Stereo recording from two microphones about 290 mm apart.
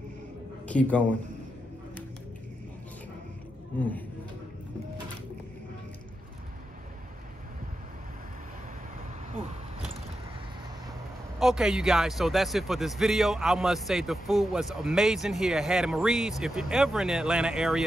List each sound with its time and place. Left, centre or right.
0.7 s a man's voice: centre
11.3 s a man's voice: centre